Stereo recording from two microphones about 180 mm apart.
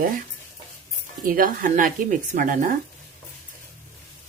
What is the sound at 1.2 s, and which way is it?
Speech, 50° right (ahead or behind).